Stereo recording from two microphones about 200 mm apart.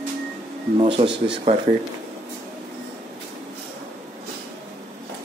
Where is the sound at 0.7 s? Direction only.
25° right (ahead or behind).